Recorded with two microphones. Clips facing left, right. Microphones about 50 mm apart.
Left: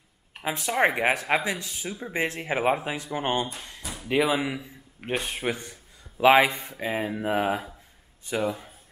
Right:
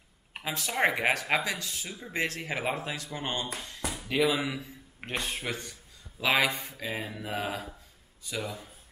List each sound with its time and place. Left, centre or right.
0.6 s speech: centre
6.1 s a man's voice: left